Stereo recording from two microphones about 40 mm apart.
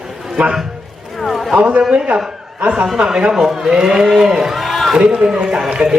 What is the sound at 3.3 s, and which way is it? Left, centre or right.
A man's voice, centre.